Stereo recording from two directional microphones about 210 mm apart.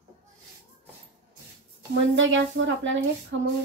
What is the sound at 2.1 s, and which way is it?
Speech, 65° right (ahead or behind).